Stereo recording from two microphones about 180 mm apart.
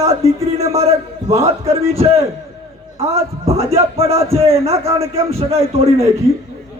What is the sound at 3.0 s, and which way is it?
A man's voice, 35° right (ahead or behind).